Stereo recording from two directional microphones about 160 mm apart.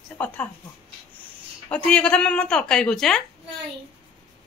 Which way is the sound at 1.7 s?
5° left (ahead or behind).